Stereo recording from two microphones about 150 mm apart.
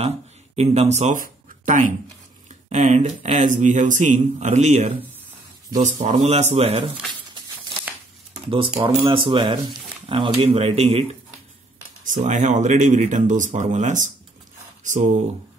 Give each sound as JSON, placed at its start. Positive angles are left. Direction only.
{"t": 0.6, "sound": "a man's voice", "side_deg": -50}
{"t": 8.5, "sound": "speech", "side_deg": -35}
{"t": 12.0, "sound": "a man's voice", "side_deg": -55}